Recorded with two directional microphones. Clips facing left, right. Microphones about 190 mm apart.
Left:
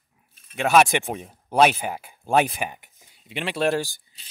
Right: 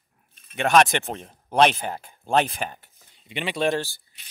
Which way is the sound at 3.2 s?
Centre (ahead or behind).